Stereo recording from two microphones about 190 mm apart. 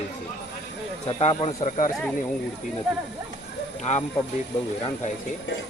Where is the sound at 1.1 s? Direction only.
30° left (ahead or behind).